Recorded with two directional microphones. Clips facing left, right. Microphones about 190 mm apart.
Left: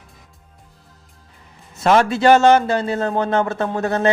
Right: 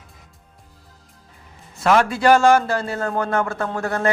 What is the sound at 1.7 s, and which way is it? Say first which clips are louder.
Speech: left 2 dB; 25° left (ahead or behind).